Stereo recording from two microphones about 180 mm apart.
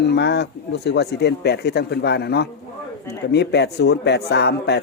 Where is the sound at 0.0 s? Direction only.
70° left (ahead or behind).